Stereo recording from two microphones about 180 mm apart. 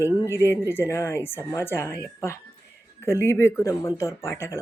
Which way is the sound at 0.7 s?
15° left (ahead or behind).